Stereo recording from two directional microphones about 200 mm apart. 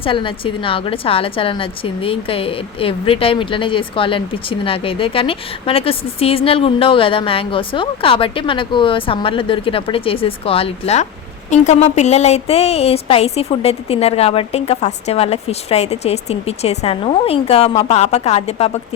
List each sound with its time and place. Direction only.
0.0 s a woman's voice: 25° left (ahead or behind)